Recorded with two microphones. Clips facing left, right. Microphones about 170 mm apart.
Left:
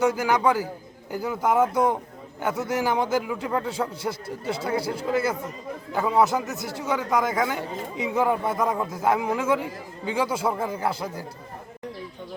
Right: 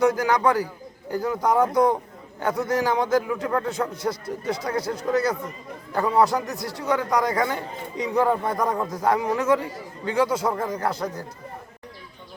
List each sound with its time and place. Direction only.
0.0 s a man's voice: 5° left (ahead or behind)
4.1 s speech: 25° left (ahead or behind)
4.7 s a man's voice: 10° left (ahead or behind)